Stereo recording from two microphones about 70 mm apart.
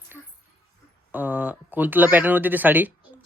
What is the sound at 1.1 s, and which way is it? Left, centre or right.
Speech, right.